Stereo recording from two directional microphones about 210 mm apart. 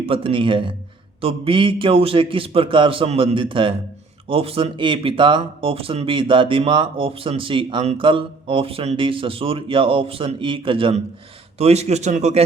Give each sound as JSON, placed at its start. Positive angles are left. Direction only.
{"t": 0.0, "sound": "a man's voice", "side_deg": -25}